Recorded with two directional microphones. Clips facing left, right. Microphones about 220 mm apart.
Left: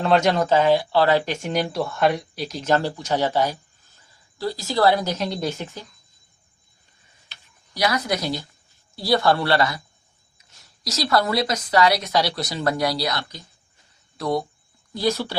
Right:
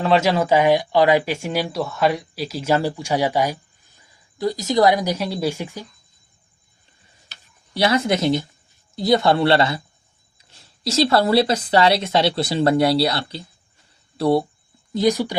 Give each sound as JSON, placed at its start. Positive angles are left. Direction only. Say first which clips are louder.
{"t": 0.0, "sound": "speech", "louder": "right 1 dB", "side_deg": 0}
{"t": 7.7, "sound": "a woman's voice", "louder": "right 5 dB", "side_deg": -25}
{"t": 14.9, "sound": "speech", "louder": "right 5 dB", "side_deg": -15}